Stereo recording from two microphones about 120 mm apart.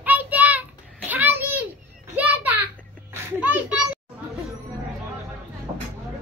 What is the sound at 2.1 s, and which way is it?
Children playing, 15° right (ahead or behind).